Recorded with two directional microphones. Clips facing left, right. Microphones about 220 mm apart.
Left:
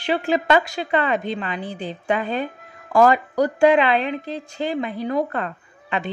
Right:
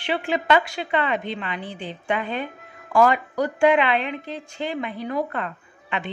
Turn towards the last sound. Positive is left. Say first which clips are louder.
# left 3 dB
turn(degrees=40)  # may be behind; listen again after turning